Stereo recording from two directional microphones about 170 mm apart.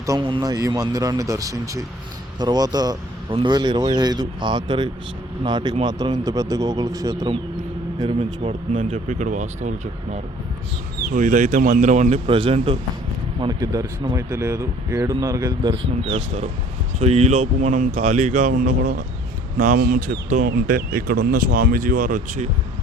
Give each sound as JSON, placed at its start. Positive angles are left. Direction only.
{"t": 0.0, "sound": "speech", "side_deg": -25}
{"t": 8.4, "sound": "speech", "side_deg": -30}
{"t": 18.5, "sound": "speech", "side_deg": -65}
{"t": 19.5, "sound": "speech", "side_deg": -55}